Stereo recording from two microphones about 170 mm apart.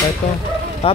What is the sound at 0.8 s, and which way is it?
Speech, 35° left (ahead or behind).